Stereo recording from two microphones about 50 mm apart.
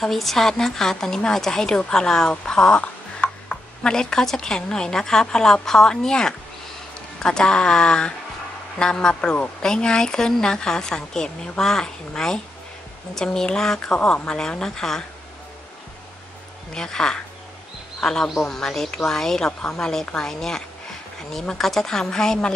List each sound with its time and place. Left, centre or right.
0.0 s speech: centre
13.9 s speech: left
16.7 s speech: centre